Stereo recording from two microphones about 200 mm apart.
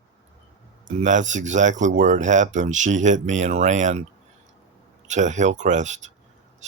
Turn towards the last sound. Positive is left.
turn(degrees=-35)  # may be behind; listen again after turning